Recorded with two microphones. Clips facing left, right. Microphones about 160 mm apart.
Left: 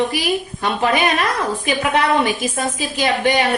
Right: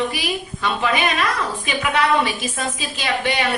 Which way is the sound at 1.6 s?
50° left (ahead or behind).